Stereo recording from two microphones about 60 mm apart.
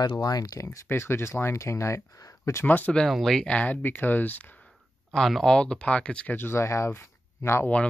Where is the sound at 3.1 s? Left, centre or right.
Centre.